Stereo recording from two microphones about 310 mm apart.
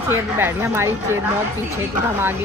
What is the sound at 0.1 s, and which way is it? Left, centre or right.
Speech, centre.